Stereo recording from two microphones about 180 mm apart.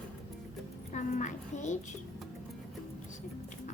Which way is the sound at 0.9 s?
40° left (ahead or behind).